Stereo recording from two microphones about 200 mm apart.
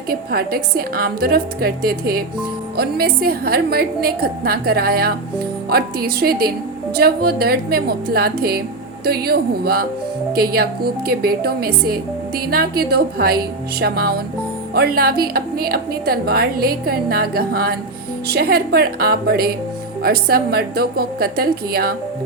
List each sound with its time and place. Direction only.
0.1 s a woman's voice: 50° right (ahead or behind)